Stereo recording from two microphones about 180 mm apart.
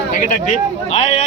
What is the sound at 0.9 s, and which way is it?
Speech, 35° left (ahead or behind).